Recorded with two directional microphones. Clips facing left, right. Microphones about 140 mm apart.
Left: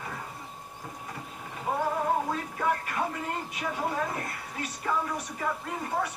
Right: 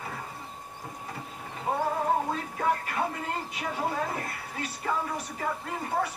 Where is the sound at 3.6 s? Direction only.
Centre (ahead or behind).